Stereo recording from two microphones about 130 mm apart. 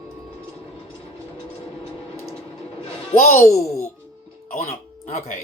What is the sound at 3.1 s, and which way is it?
Speech, 60° left (ahead or behind).